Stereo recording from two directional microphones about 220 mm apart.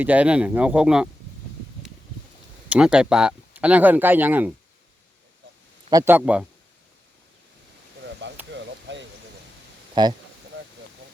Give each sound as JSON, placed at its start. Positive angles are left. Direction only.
{"t": 0.0, "sound": "speech", "side_deg": -5}
{"t": 2.6, "sound": "speech", "side_deg": -5}
{"t": 5.9, "sound": "speech", "side_deg": -10}
{"t": 8.4, "sound": "a sound", "side_deg": -55}
{"t": 9.9, "sound": "speech", "side_deg": -20}